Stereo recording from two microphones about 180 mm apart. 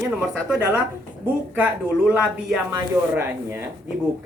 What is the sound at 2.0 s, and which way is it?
A woman's voice, 5° right (ahead or behind).